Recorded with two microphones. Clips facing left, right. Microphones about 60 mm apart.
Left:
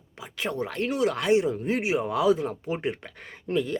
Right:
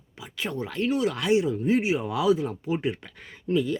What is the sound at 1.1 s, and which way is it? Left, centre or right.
Speech, left.